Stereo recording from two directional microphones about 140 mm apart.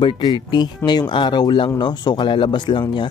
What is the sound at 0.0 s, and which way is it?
Speech, 30° left (ahead or behind).